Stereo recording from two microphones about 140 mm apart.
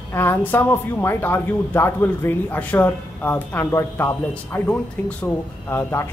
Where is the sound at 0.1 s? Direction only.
15° left (ahead or behind).